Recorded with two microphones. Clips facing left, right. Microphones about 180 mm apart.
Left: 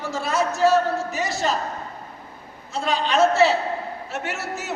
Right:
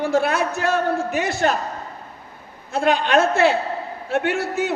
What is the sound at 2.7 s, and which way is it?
A man's voice, 55° right (ahead or behind).